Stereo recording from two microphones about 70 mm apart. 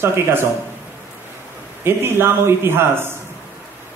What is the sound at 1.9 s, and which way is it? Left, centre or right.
A man's voice, right.